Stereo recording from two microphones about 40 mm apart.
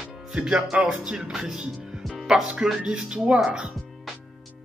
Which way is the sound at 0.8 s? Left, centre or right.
Centre.